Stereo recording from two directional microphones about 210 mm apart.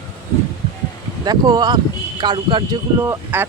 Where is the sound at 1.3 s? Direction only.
20° right (ahead or behind).